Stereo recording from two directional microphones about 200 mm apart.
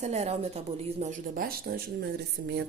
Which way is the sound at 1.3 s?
45° right (ahead or behind).